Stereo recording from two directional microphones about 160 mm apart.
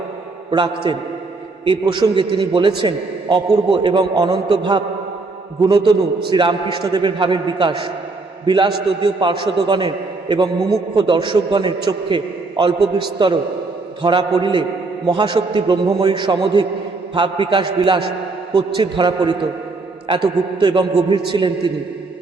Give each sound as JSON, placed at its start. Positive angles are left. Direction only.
{"t": 0.5, "sound": "a man's voice", "side_deg": -30}